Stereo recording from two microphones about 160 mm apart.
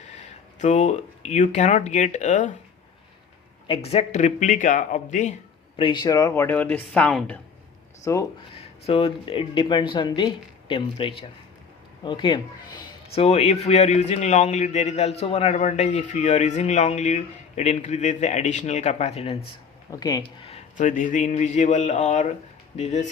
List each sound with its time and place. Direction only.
0.0 s speech: 45° left (ahead or behind)
3.7 s speech: 40° left (ahead or behind)
5.7 s speech: 30° left (ahead or behind); by 7.3 s 5° left (ahead or behind)
8.1 s speech: 20° left (ahead or behind)
8.5 s speech: 35° left (ahead or behind)
13.2 s speech: 40° left (ahead or behind)
19.9 s speech: 25° left (ahead or behind)
20.2 s speech: 35° left (ahead or behind)